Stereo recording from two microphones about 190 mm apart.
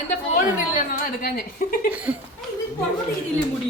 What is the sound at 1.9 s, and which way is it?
Speech, 5° right (ahead or behind).